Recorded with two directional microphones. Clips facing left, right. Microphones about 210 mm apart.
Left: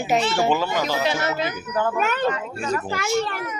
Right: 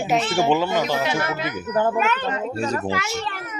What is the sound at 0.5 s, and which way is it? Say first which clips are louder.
Speech: right 2 dB; 20° right (ahead or behind).